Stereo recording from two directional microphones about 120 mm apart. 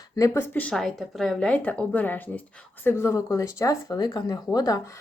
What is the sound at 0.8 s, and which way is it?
Speech, centre (ahead or behind).